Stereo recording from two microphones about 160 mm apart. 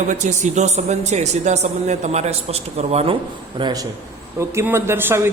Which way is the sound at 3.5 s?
25° right (ahead or behind).